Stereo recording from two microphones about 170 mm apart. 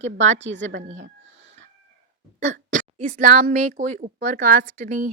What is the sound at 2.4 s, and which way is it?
Speech, 45° right (ahead or behind).